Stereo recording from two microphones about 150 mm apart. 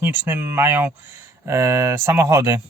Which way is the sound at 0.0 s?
15° right (ahead or behind).